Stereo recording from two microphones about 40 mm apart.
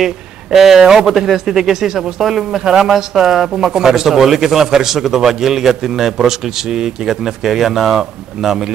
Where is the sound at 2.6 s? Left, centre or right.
Centre.